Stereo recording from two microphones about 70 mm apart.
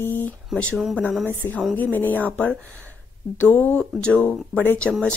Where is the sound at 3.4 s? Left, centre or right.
Left.